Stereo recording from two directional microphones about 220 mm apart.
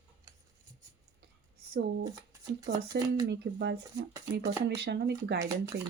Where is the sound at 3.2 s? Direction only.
50° right (ahead or behind).